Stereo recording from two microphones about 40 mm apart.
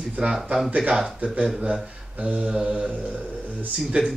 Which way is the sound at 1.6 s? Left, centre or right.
Right.